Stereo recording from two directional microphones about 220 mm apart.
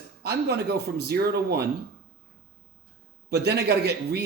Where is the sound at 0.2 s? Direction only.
45° right (ahead or behind).